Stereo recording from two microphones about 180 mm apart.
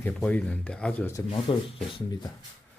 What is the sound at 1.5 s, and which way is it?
Speech, 30° left (ahead or behind).